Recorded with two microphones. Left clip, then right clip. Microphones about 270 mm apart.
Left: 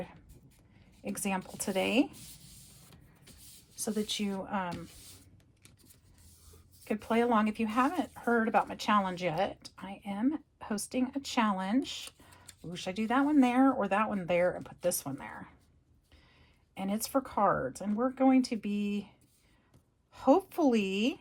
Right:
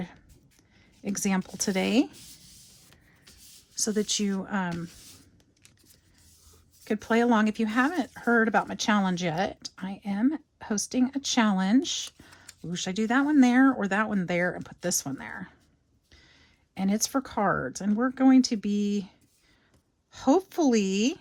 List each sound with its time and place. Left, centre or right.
1.0 s speech: right
2.2 s spray: centre
3.8 s speech: right
6.8 s speech: right
16.7 s speech: right
20.1 s speech: right